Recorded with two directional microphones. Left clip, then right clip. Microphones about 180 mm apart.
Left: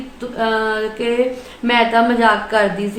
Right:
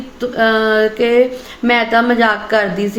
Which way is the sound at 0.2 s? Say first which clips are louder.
Right 5 dB; 30° right (ahead or behind).